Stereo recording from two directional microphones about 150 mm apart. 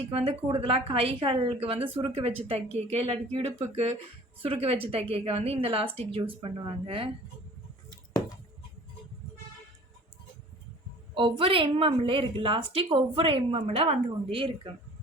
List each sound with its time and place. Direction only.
0.1 s a woman's voice: 40° right (ahead or behind)
3.5 s speech: 15° right (ahead or behind)
4.4 s a woman's voice: 40° right (ahead or behind)
11.1 s a woman's voice: 35° right (ahead or behind)